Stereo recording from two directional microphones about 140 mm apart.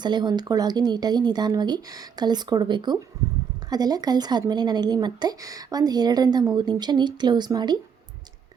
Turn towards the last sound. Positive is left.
turn(degrees=-30)  # may be behind; listen again after turning